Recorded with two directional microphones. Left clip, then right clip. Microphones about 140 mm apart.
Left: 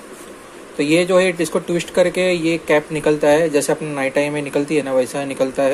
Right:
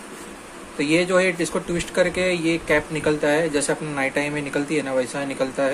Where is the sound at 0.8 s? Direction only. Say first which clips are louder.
Left 4 dB; 25° left (ahead or behind).